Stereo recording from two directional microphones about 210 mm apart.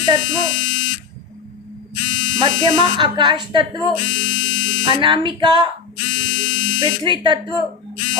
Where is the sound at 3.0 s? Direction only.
20° right (ahead or behind).